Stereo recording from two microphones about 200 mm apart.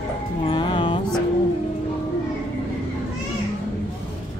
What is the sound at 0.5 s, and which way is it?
Music, 25° left (ahead or behind).